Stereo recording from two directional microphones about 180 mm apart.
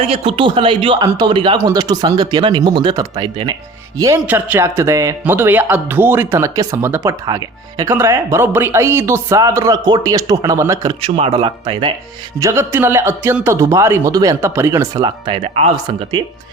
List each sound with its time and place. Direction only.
0.0 s speech: 30° right (ahead or behind)
11.0 s speech: 30° right (ahead or behind)
12.4 s speech: 15° right (ahead or behind); by 15.8 s 35° right (ahead or behind)